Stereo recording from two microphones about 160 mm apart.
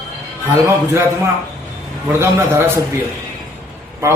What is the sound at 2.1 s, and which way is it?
Speech, 15° right (ahead or behind).